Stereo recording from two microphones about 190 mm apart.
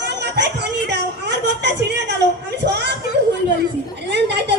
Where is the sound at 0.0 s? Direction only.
65° right (ahead or behind).